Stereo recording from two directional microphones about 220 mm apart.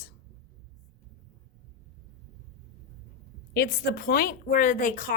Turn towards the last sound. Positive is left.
turn(degrees=35)  # may be behind; listen again after turning